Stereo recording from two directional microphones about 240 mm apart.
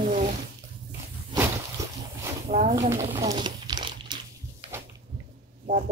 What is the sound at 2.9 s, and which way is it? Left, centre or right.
Crumpling, centre.